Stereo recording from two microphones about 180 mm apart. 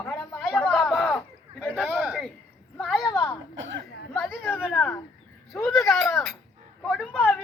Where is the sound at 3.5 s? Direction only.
90° right.